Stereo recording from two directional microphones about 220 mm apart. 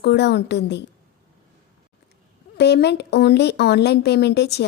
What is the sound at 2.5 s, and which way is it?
A woman's voice, 50° left (ahead or behind).